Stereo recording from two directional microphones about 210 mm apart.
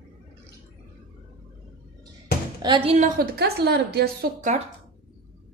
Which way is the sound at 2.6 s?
20° right (ahead or behind).